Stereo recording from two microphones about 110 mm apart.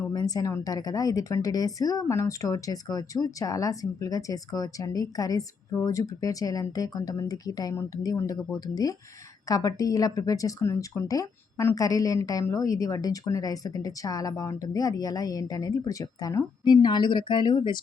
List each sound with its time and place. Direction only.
0.1 s a woman's voice: 35° left (ahead or behind)